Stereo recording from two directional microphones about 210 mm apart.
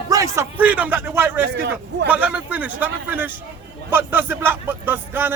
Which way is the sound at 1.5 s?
55° right (ahead or behind).